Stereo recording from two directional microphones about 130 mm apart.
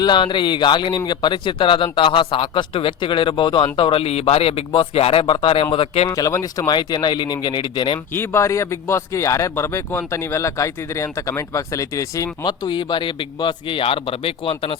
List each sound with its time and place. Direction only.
0.0 s speech: 35° left (ahead or behind)
5.2 s speech: 35° left (ahead or behind)
6.1 s speech: 25° left (ahead or behind)
7.9 s speech: 15° left (ahead or behind); by 14.8 s 45° left (ahead or behind)